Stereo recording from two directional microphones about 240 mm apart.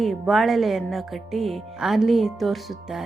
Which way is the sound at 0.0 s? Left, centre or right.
Centre.